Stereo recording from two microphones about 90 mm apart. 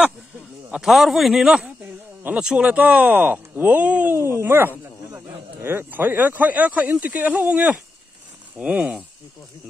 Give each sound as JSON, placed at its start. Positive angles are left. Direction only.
{"t": 0.7, "sound": "a man's voice", "side_deg": -5}